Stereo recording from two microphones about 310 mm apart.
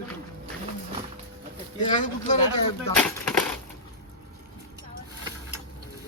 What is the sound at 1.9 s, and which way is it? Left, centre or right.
Speech, left.